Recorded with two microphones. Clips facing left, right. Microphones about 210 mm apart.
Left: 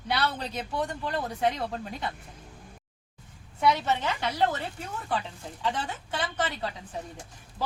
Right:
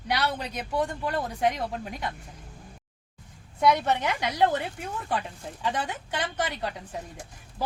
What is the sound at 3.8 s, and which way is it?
Speech, 15° right (ahead or behind).